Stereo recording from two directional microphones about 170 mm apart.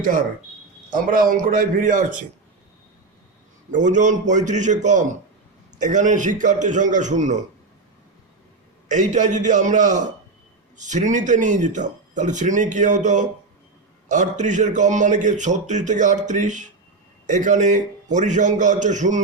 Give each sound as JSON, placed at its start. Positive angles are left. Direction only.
{"t": 0.0, "sound": "a man's voice", "side_deg": -50}
{"t": 3.7, "sound": "a man's voice", "side_deg": -45}
{"t": 8.9, "sound": "a man's voice", "side_deg": -45}